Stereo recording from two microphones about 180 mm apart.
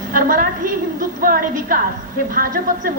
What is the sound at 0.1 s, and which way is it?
A woman's voice, 50° right (ahead or behind).